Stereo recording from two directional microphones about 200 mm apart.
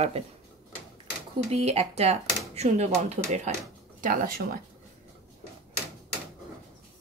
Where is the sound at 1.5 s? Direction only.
30° right (ahead or behind).